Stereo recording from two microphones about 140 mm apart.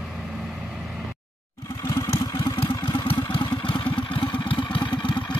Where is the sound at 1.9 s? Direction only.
20° left (ahead or behind).